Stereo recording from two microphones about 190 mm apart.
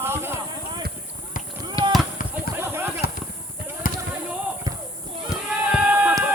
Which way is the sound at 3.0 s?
55° left (ahead or behind).